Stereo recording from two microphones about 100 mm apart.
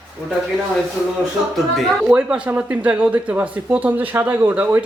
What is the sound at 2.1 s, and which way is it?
Speech, 10° right (ahead or behind).